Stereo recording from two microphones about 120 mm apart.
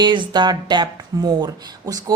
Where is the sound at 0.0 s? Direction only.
40° right (ahead or behind).